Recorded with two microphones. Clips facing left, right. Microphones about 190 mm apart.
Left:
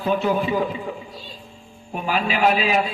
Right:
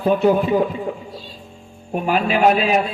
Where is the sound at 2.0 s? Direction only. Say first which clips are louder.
Right 4 dB; 50° right (ahead or behind).